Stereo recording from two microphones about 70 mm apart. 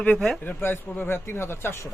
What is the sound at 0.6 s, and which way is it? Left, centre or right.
A man's voice, left.